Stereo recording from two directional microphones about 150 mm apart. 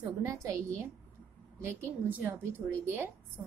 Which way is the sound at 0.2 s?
20° right (ahead or behind).